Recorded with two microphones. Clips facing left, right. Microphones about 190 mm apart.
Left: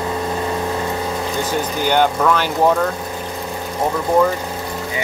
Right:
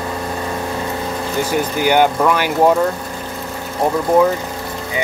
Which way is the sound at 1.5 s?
10° right (ahead or behind).